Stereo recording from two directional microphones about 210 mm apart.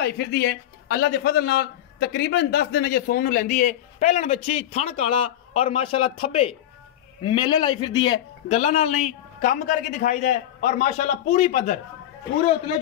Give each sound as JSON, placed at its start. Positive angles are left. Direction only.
{"t": 0.0, "sound": "a man's voice", "side_deg": 50}